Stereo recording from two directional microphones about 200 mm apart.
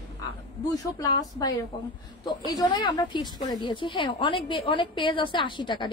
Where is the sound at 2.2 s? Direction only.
20° left (ahead or behind).